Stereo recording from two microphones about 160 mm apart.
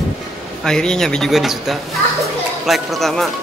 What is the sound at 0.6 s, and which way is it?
Speech, 5° left (ahead or behind).